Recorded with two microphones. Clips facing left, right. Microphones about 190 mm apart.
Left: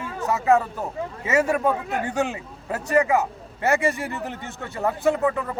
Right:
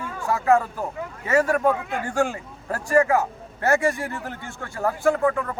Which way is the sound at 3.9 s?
15° left (ahead or behind).